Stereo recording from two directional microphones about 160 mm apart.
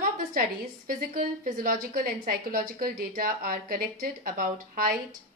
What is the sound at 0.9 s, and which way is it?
A woman's voice, 60° right (ahead or behind).